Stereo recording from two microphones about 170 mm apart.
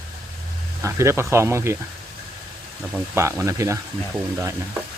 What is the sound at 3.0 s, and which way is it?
Speech, 15° right (ahead or behind).